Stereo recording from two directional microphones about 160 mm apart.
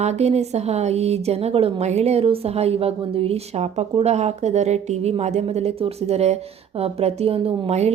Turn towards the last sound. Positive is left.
turn(degrees=-40)  # may be behind; listen again after turning